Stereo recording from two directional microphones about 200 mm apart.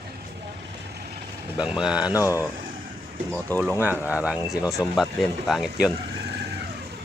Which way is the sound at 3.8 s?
10° right (ahead or behind).